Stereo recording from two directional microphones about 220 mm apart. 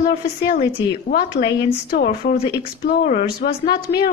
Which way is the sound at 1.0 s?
40° left (ahead or behind).